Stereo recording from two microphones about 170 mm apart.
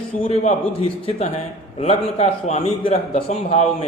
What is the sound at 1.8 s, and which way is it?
A man's voice, 40° left (ahead or behind).